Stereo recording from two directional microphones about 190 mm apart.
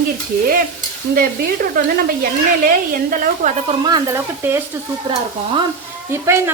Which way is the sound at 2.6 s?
45° right (ahead or behind).